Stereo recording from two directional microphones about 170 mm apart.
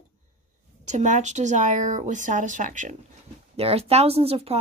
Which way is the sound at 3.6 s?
35° right (ahead or behind).